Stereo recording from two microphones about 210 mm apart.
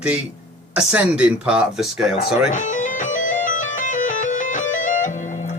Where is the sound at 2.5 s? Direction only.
35° left (ahead or behind).